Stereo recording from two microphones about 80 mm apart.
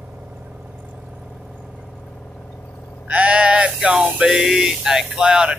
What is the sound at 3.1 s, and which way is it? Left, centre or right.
Sheep, centre.